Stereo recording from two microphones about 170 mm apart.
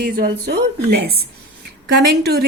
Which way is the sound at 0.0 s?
65° right (ahead or behind).